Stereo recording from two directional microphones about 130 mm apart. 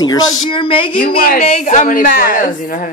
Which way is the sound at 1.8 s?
90° left.